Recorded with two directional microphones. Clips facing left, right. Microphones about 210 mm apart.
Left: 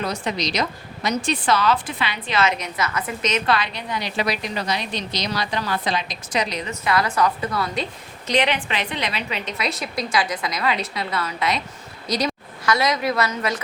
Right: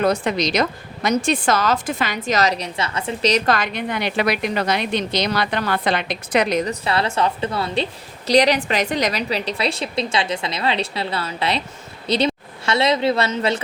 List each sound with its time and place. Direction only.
0.0 s a woman's voice: 55° right (ahead or behind)
6.7 s speech: 30° right (ahead or behind)
8.3 s a woman's voice: 40° right (ahead or behind)